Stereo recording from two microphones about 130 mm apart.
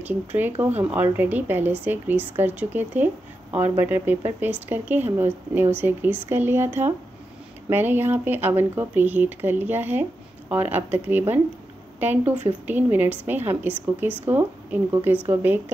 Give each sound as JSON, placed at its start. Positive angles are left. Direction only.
{"t": 0.0, "sound": "speech", "side_deg": -15}